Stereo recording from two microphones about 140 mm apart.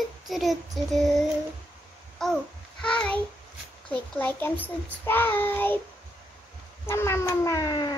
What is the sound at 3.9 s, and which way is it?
Child singing, 10° left (ahead or behind).